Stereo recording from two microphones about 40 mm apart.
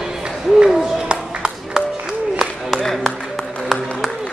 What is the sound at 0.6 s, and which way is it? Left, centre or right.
Music, right.